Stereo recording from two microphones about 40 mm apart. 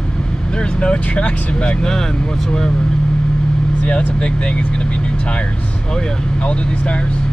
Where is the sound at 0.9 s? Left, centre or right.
Left.